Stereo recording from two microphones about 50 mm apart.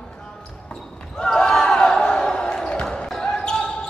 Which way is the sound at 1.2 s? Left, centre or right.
Centre.